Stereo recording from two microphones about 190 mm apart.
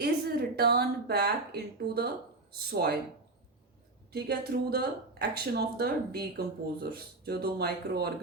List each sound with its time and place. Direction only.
0.0 s speech: 55° right (ahead or behind)
4.1 s speech: 55° right (ahead or behind)